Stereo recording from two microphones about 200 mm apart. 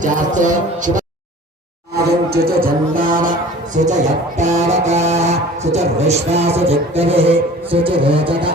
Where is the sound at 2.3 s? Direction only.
50° right (ahead or behind).